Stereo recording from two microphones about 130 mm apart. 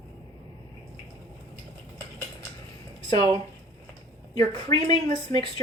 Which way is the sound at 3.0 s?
35° left (ahead or behind).